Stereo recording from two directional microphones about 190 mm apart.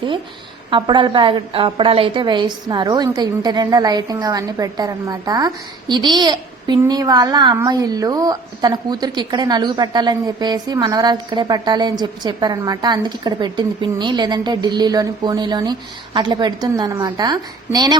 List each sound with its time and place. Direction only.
0.7 s a woman's voice: 25° right (ahead or behind)